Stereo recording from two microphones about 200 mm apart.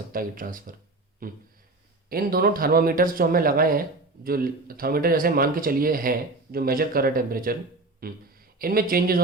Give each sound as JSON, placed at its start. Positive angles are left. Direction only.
{"t": 0.1, "sound": "speech", "side_deg": -45}